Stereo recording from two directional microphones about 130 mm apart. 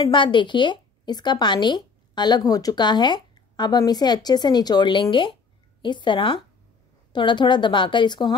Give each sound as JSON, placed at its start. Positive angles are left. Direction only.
{"t": 0.0, "sound": "a woman's voice", "side_deg": 40}